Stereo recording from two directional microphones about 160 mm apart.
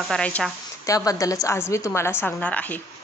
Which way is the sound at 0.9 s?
20° left (ahead or behind).